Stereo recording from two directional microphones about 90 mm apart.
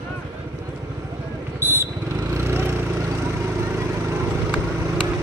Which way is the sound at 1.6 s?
25° right (ahead or behind).